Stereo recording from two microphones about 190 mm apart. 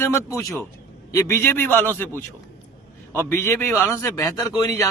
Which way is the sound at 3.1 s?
15° left (ahead or behind).